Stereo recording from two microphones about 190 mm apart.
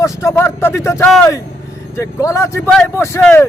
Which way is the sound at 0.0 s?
15° left (ahead or behind).